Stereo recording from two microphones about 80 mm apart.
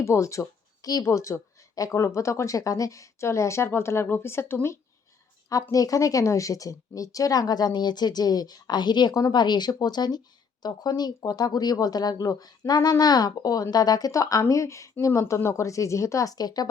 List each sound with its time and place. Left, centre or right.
0.0 s speech: left
1.0 s speech: left
5.7 s speech: left